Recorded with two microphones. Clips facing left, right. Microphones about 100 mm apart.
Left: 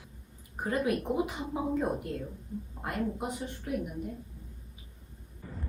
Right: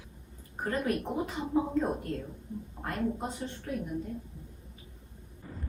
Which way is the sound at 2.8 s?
15° left (ahead or behind).